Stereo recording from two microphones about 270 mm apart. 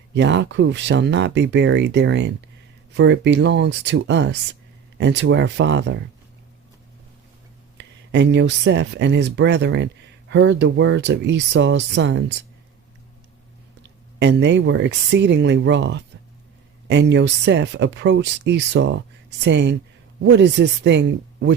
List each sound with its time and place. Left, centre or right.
0.1 s speech: right
7.8 s speech: right
13.8 s speech: right